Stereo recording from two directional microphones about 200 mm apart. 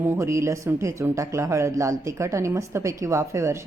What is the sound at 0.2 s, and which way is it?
Speech, 15° right (ahead or behind).